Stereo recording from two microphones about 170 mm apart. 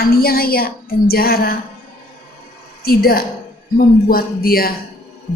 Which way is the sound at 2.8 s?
60° left (ahead or behind).